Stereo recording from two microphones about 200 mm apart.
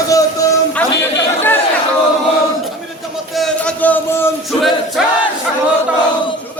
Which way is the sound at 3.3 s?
5° left (ahead or behind).